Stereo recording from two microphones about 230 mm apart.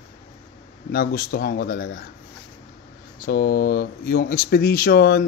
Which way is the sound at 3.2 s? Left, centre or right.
Left.